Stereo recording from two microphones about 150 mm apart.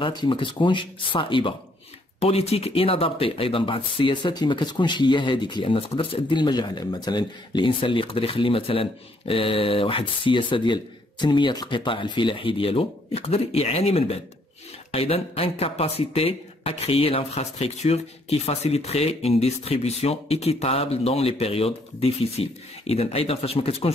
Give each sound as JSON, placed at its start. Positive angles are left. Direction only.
{"t": 0.0, "sound": "speech", "side_deg": 30}